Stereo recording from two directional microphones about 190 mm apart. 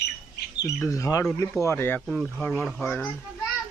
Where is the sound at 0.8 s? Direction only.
15° left (ahead or behind).